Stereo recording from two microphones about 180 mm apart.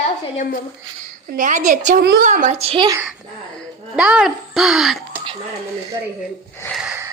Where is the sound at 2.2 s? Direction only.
45° right (ahead or behind); by 3.0 s 25° right (ahead or behind).